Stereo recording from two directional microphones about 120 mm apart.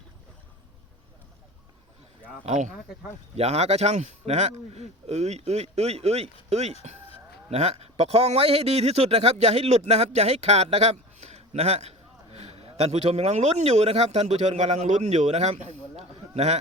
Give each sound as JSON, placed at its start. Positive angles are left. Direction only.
{"t": 2.5, "sound": "speech", "side_deg": -80}
{"t": 3.3, "sound": "a man's voice", "side_deg": -60}